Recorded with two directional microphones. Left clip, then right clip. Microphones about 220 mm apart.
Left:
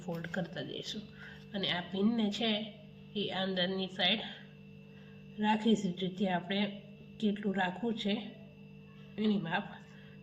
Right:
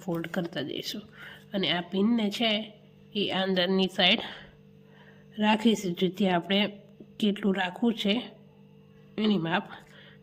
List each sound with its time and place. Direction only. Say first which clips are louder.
0.0 s speech: right 7 dB; 50° right (ahead or behind)
5.4 s speech: right 6 dB; 50° right (ahead or behind)